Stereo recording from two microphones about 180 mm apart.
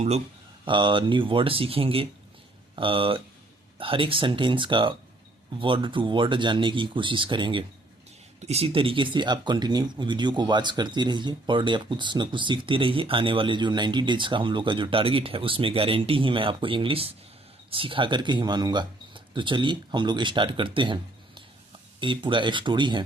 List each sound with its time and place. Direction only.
0.6 s speech: 25° right (ahead or behind)